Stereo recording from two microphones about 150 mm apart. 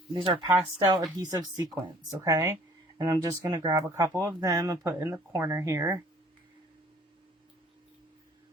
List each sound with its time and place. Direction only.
0.1 s speech: 35° right (ahead or behind)